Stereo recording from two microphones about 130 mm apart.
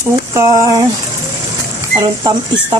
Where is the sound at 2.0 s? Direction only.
30° right (ahead or behind).